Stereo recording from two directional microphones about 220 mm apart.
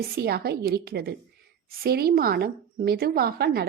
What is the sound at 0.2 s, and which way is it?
A woman's voice, 45° right (ahead or behind).